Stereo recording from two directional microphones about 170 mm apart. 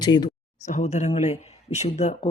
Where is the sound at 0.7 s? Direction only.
40° left (ahead or behind).